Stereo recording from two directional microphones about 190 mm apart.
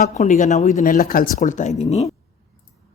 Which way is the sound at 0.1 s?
40° left (ahead or behind).